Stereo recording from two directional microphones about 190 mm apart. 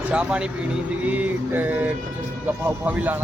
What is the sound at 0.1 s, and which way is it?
Speech, 5° right (ahead or behind).